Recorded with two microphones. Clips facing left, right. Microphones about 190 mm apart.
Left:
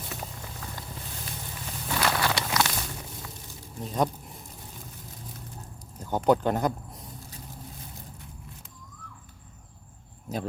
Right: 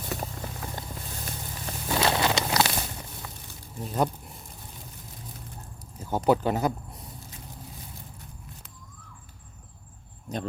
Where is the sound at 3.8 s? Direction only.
5° right (ahead or behind).